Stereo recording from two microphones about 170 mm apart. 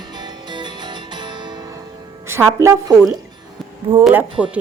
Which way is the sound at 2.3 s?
15° right (ahead or behind).